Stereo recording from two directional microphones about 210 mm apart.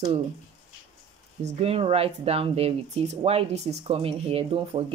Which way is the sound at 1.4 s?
30° right (ahead or behind).